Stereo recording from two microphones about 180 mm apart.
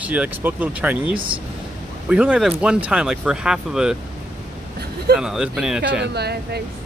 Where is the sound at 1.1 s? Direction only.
30° right (ahead or behind).